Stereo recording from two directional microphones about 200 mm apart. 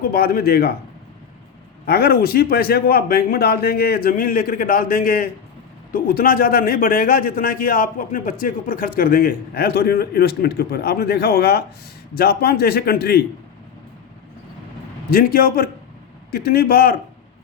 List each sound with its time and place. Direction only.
0.0 s a man's voice: 50° left (ahead or behind)
1.9 s a man's voice: 50° left (ahead or behind)
15.1 s a man's voice: 45° left (ahead or behind)